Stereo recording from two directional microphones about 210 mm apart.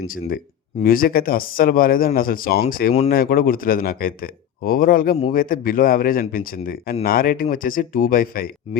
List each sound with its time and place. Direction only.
0.8 s speech: 45° left (ahead or behind)